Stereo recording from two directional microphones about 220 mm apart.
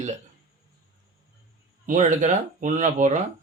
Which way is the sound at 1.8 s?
35° right (ahead or behind).